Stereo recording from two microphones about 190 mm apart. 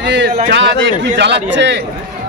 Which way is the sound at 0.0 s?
70° right (ahead or behind).